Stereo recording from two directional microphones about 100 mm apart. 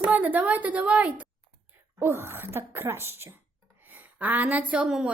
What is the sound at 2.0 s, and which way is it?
Speech, 25° right (ahead or behind).